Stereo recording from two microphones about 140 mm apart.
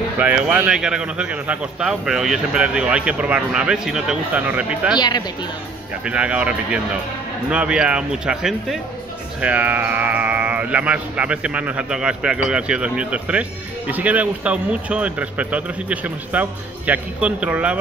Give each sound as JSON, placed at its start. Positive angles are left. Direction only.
{"t": 0.2, "sound": "speech", "side_deg": -10}
{"t": 4.9, "sound": "speech", "side_deg": 30}
{"t": 6.0, "sound": "speech", "side_deg": -10}